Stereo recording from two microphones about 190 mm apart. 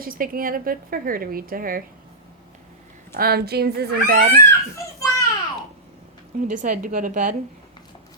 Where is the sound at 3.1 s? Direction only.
55° right (ahead or behind).